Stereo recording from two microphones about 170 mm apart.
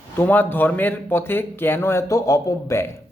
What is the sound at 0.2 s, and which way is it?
Speech, 10° left (ahead or behind).